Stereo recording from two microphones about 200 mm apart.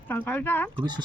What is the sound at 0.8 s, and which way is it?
Speech, 20° right (ahead or behind).